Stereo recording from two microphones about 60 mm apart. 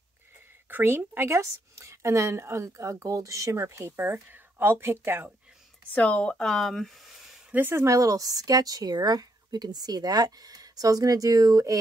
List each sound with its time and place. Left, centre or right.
0.7 s speech: right
1.4 s speech: right
3.5 s speech: right
3.9 s speech: right
5.9 s speech: left; by 7.1 s centre
7.8 s speech: right